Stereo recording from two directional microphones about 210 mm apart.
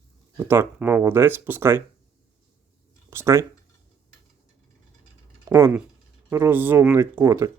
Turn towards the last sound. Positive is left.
turn(degrees=-15)  # may be behind; listen again after turning